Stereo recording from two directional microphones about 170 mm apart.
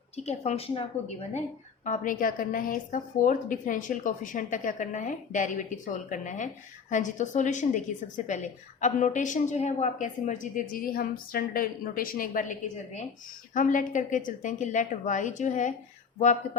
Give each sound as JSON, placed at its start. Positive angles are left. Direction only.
{"t": 0.3, "sound": "a woman's voice", "side_deg": 40}
{"t": 1.8, "sound": "a woman's voice", "side_deg": 50}